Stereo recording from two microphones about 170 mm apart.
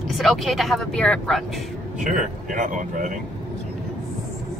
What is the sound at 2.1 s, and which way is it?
Speech, 50° right (ahead or behind).